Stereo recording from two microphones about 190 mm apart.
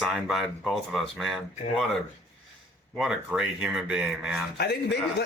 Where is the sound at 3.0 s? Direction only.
5° right (ahead or behind).